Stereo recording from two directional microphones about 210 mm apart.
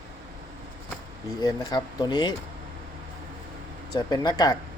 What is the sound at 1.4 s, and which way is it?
Speech, 20° left (ahead or behind).